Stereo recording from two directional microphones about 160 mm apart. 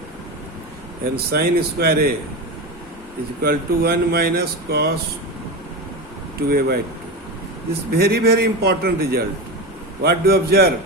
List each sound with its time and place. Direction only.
1.1 s speech: 75° right (ahead or behind)
3.4 s speech: 70° right (ahead or behind)
6.5 s speech: 70° right (ahead or behind)
7.9 s a man's voice: 80° right